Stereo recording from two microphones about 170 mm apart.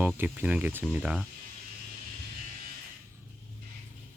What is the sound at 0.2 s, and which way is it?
Speech, 10° right (ahead or behind).